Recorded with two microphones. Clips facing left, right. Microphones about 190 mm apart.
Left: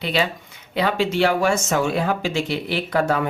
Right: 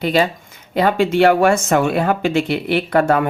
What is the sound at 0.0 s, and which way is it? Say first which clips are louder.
Speech: right 6 dB; 45° right (ahead or behind).